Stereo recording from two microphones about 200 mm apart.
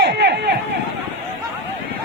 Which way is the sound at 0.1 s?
60° right (ahead or behind).